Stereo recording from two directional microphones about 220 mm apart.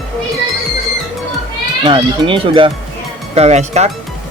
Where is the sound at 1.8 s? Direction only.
25° right (ahead or behind).